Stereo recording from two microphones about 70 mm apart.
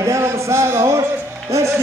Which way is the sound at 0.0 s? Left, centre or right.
Right.